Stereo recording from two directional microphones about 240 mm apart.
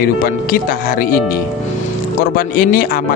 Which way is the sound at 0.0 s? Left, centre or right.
Left.